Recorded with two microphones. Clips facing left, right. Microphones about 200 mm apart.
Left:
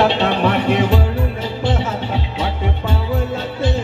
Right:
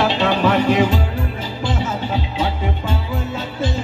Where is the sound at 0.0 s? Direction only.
65° left (ahead or behind).